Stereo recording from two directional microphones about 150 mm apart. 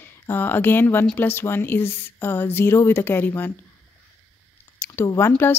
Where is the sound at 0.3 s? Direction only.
15° left (ahead or behind).